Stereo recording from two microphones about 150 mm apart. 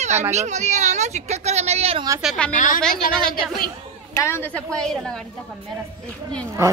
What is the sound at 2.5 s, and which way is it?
Speech, 60° left (ahead or behind).